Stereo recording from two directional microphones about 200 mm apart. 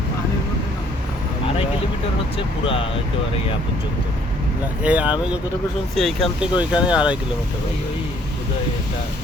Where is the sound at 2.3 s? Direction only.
25° left (ahead or behind).